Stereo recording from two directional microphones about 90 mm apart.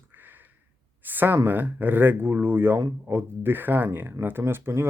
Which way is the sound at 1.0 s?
20° right (ahead or behind).